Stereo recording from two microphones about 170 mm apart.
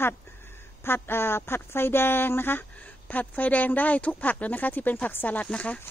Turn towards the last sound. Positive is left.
turn(degrees=5)  # may be behind; listen again after turning